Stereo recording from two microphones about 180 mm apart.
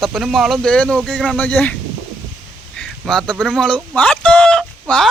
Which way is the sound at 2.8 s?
5° left (ahead or behind).